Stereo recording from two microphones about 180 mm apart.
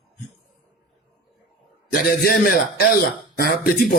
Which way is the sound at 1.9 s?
55° left (ahead or behind).